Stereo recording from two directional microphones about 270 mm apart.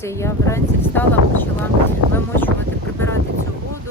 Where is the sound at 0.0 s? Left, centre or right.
Centre.